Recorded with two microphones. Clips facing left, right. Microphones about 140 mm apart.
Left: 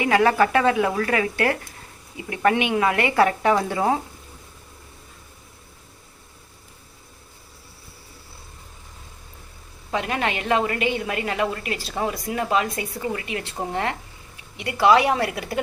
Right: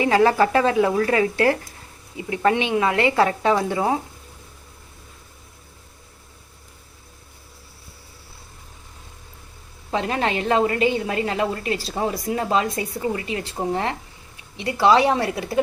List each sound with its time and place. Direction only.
0.0 s a woman's voice: 30° right (ahead or behind)
9.9 s a woman's voice: 30° right (ahead or behind)
14.5 s a woman's voice: 30° right (ahead or behind)